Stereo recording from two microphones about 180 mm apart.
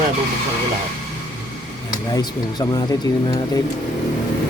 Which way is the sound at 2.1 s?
20° left (ahead or behind).